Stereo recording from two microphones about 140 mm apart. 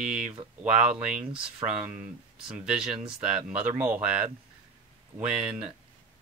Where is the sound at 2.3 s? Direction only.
5° right (ahead or behind).